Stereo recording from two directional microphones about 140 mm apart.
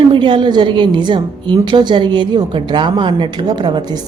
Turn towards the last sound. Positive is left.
turn(degrees=-30)  # may be behind; listen again after turning